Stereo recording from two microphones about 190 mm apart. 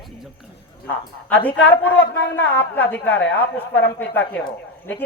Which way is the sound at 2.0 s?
70° left (ahead or behind).